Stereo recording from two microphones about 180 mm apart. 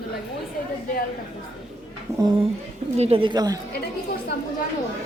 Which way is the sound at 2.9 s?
35° right (ahead or behind).